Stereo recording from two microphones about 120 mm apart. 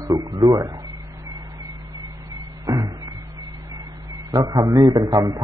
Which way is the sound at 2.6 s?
30° right (ahead or behind).